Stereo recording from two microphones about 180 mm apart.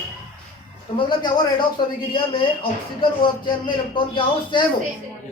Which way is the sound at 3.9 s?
25° left (ahead or behind).